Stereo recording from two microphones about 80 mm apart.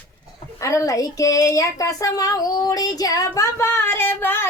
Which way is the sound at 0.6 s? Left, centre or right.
Left.